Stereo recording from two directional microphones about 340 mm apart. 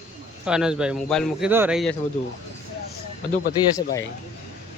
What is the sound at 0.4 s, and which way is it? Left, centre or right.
A man's voice, centre.